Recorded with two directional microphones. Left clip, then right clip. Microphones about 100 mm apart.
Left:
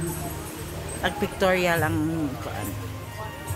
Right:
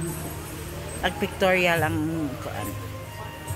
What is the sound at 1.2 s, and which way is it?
Speech, 10° left (ahead or behind).